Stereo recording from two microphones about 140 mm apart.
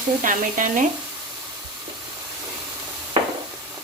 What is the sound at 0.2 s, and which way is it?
Speech, 70° right (ahead or behind).